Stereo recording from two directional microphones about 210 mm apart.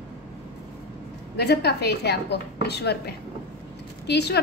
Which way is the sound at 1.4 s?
50° left (ahead or behind).